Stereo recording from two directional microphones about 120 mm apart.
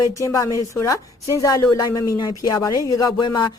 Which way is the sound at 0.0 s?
25° left (ahead or behind).